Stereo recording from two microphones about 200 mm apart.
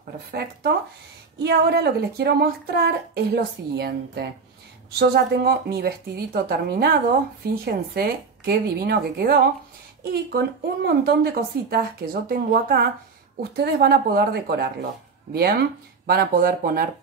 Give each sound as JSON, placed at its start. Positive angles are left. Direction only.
{"t": 0.3, "sound": "speech", "side_deg": -50}